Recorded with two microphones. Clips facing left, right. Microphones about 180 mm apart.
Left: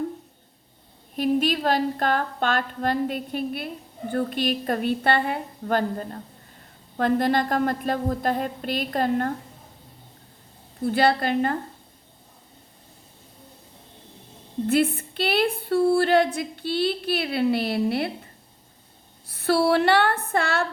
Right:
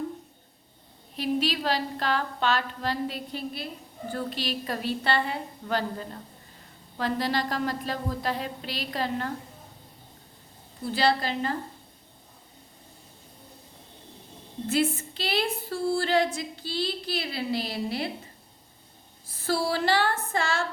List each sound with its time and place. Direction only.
1.1 s a woman's voice: 50° left (ahead or behind)
10.8 s a woman's voice: 55° left (ahead or behind)
14.7 s a woman's voice: 55° left (ahead or behind)
19.3 s a woman's voice: 65° left (ahead or behind)